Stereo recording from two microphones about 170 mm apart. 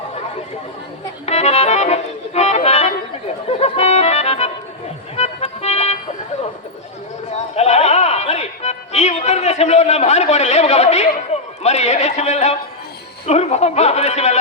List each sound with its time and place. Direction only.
1.2 s music: 40° left (ahead or behind)
7.5 s music: 40° left (ahead or behind)
11.6 s a sound: 40° left (ahead or behind)